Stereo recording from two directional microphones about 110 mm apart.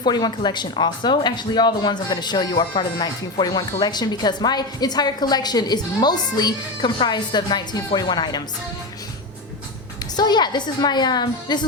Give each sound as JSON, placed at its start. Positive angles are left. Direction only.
{"t": 0.0, "sound": "speech", "side_deg": 40}
{"t": 10.2, "sound": "speech", "side_deg": 40}